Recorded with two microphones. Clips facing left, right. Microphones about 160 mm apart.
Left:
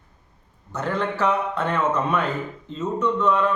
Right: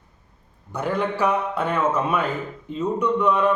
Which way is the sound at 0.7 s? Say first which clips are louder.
Right 1 dB; 10° right (ahead or behind).